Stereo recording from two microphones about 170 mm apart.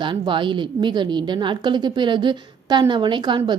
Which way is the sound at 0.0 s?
30° right (ahead or behind).